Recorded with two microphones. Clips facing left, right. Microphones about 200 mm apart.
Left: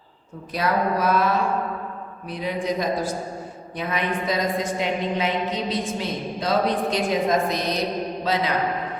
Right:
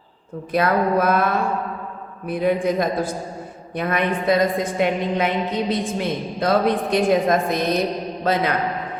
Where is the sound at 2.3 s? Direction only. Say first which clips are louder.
Right 6 dB; 55° right (ahead or behind).